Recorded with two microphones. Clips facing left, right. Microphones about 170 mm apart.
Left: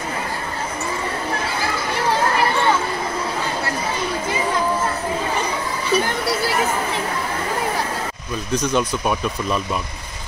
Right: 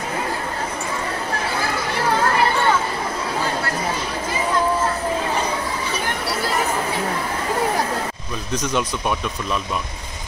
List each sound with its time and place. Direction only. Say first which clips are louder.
8.5 s speech: left 3 dB; centre (ahead or behind)